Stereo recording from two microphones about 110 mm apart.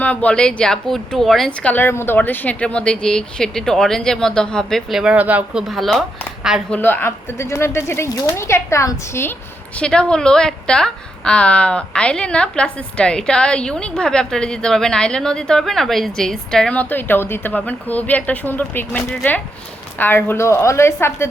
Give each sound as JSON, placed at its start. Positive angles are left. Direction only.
{"t": 0.0, "sound": "a woman's voice", "side_deg": 15}
{"t": 5.6, "sound": "speech", "side_deg": 0}
{"t": 6.7, "sound": "speech", "side_deg": 15}
{"t": 9.7, "sound": "a woman's voice", "side_deg": 10}